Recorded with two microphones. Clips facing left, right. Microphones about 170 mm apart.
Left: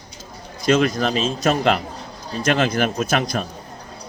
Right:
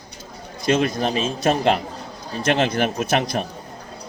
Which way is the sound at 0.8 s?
25° right (ahead or behind).